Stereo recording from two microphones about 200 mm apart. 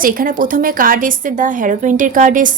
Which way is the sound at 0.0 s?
45° right (ahead or behind).